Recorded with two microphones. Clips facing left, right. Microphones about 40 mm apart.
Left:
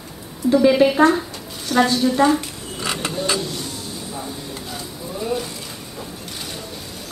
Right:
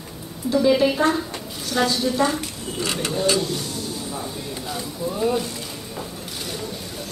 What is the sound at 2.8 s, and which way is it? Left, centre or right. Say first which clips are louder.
Mechanisms: left 1 dB; centre.